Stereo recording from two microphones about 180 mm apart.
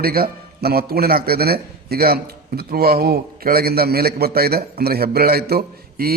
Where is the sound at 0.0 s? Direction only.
55° right (ahead or behind).